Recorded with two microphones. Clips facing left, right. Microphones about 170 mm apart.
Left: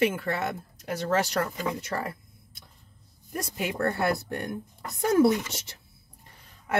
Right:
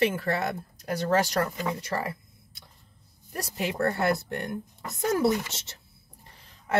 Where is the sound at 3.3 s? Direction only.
35° right (ahead or behind).